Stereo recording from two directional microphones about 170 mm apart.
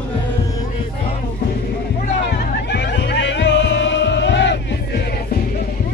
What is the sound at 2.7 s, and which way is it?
Music, 85° left.